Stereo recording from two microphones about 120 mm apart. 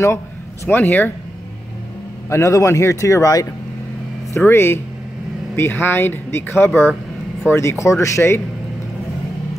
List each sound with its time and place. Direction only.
0.7 s speech: 15° left (ahead or behind)
2.2 s speech: 25° left (ahead or behind)